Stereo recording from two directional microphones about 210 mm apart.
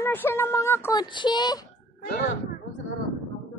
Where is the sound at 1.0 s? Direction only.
20° left (ahead or behind).